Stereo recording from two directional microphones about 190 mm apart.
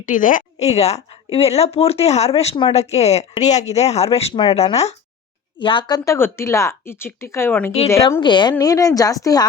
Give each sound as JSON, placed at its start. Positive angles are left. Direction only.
{"t": 0.0, "sound": "a woman's voice", "side_deg": 45}